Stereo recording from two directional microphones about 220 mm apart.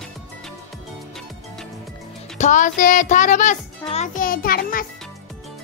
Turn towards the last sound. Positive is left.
turn(degrees=40)  # may be behind; listen again after turning